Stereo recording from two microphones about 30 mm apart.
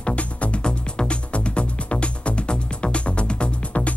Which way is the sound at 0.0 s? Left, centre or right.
Left.